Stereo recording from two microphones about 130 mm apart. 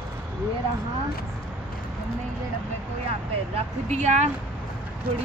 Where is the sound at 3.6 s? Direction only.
60° right (ahead or behind).